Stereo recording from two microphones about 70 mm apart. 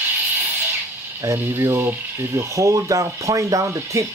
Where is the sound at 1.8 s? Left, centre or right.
Right.